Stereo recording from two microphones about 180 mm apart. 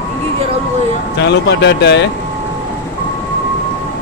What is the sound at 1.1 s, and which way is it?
Speech, 70° left (ahead or behind).